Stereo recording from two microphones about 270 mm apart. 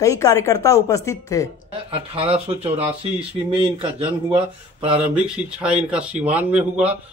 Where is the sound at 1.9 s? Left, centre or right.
Right.